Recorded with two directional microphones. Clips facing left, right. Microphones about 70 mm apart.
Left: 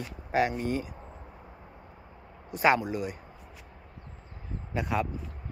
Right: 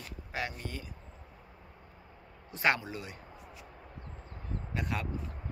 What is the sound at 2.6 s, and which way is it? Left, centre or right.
Speech, centre.